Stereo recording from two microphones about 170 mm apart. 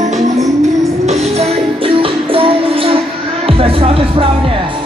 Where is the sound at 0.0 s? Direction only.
45° right (ahead or behind).